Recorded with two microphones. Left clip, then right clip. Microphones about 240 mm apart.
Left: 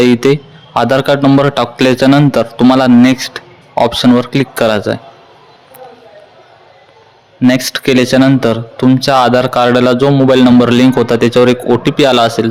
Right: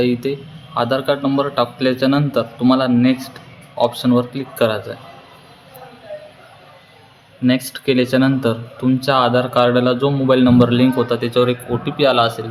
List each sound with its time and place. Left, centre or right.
0.0 s speech: left
7.4 s speech: left